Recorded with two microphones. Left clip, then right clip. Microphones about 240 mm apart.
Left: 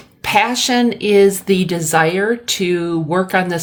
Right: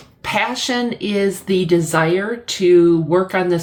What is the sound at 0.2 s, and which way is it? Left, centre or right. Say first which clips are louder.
A woman's voice: left 5 dB; left.